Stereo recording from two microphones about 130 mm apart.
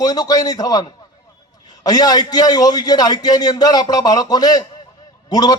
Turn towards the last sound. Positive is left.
turn(degrees=30)  # may be behind; listen again after turning